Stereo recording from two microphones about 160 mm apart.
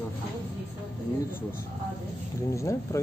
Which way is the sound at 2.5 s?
20° left (ahead or behind).